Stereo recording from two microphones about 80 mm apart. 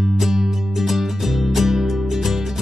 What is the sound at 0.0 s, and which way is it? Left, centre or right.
Music, centre.